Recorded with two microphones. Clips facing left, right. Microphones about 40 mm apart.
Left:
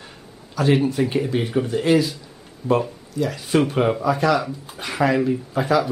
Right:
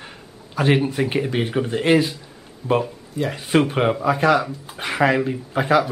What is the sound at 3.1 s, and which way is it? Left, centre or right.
Speech, right.